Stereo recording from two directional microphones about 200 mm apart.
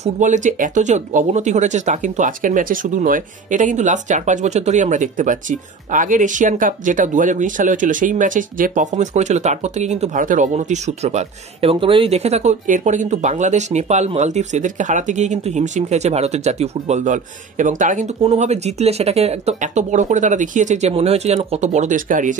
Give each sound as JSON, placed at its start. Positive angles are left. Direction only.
{"t": 0.0, "sound": "speech", "side_deg": -35}